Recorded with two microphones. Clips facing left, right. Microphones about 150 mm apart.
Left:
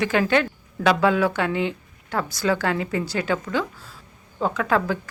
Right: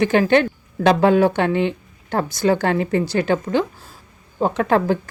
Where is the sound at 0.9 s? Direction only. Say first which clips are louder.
Right 5 dB; 40° right (ahead or behind).